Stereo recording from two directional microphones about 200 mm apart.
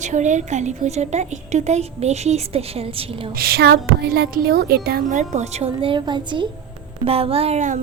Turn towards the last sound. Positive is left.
turn(degrees=-35)  # may be behind; listen again after turning